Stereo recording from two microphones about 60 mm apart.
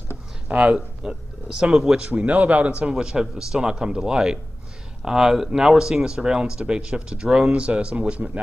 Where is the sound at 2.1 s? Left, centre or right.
Right.